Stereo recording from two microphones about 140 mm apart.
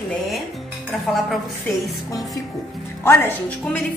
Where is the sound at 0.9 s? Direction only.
5° left (ahead or behind).